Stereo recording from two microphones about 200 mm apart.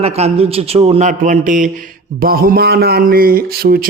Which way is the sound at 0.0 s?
30° right (ahead or behind).